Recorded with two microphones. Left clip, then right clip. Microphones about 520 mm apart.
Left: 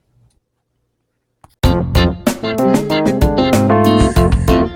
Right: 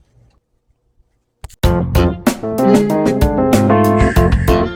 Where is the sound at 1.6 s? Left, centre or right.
Centre.